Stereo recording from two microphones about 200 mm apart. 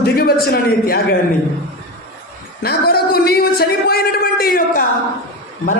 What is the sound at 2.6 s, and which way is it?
Speech, 50° left (ahead or behind).